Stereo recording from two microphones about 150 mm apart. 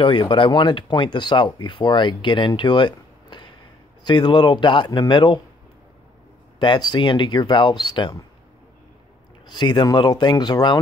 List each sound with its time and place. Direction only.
0.0 s speech: 35° left (ahead or behind)
6.6 s speech: 30° left (ahead or behind)
9.5 s speech: 30° left (ahead or behind)